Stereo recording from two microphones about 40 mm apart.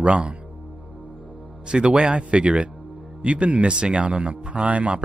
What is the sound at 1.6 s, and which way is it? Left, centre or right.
Speech, right.